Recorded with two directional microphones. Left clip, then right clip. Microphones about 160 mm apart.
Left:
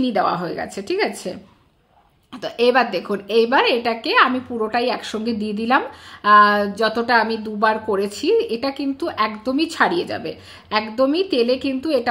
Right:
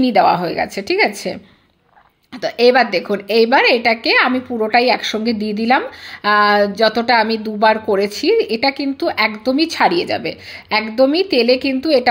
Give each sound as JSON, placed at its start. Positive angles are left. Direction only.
{"t": 0.0, "sound": "a woman's voice", "side_deg": -20}
{"t": 2.4, "sound": "a woman's voice", "side_deg": -10}